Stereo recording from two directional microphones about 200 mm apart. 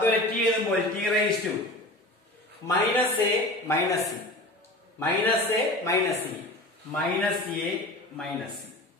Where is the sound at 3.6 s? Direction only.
15° left (ahead or behind).